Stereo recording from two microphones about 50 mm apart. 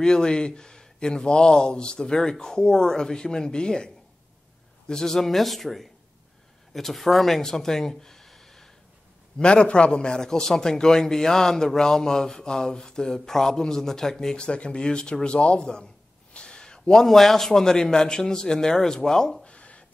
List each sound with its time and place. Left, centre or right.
0.0 s a man's voice: centre
9.4 s a man's voice: centre
14.3 s a man's voice: left
19.4 s a sound: left